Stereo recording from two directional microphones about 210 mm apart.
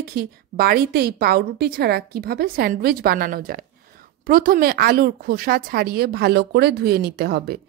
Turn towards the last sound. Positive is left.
turn(degrees=-50)  # may be behind; listen again after turning